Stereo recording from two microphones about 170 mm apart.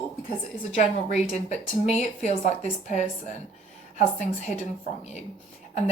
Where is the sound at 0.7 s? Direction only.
40° left (ahead or behind).